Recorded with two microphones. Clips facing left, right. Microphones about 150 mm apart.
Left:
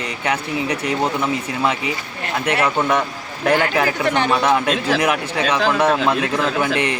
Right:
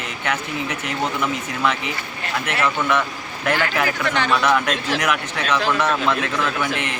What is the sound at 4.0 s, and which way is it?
Speech, 15° left (ahead or behind).